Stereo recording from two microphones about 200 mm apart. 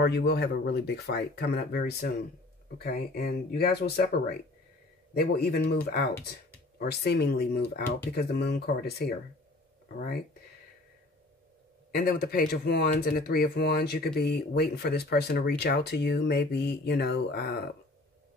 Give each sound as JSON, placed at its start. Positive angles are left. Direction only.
{"t": 0.0, "sound": "speech", "side_deg": 55}
{"t": 11.9, "sound": "speech", "side_deg": 50}